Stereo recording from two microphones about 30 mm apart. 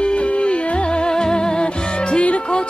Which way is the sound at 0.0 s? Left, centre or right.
Left.